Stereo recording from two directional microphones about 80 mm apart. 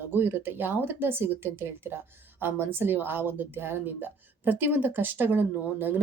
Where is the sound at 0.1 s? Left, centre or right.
Right.